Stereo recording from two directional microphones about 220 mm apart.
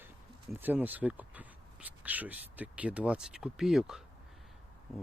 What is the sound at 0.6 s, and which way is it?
Speech, 10° right (ahead or behind).